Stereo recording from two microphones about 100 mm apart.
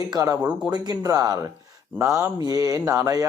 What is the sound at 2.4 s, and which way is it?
Speech, 35° right (ahead or behind).